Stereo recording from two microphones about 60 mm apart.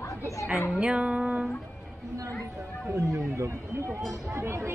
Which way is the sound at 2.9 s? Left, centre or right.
Right.